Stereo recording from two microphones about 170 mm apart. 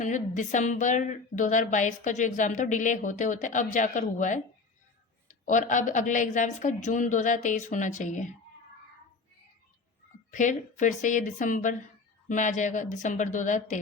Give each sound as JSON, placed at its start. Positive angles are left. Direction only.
{"t": 0.0, "sound": "speech", "side_deg": 45}
{"t": 10.3, "sound": "speech", "side_deg": 45}